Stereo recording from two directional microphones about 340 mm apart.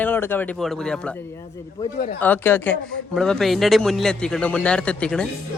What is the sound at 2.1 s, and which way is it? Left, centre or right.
A man's voice, centre.